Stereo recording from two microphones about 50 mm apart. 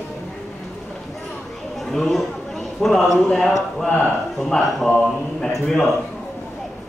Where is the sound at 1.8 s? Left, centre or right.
Centre.